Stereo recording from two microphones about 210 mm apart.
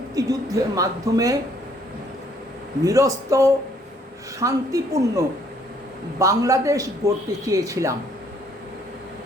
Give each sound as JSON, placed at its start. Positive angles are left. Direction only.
{"t": 0.1, "sound": "a man's voice", "side_deg": -15}
{"t": 2.8, "sound": "a man's voice", "side_deg": -15}